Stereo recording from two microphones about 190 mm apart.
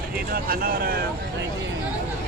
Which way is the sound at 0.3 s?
50° right (ahead or behind).